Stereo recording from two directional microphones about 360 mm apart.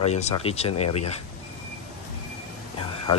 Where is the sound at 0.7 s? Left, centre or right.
Left.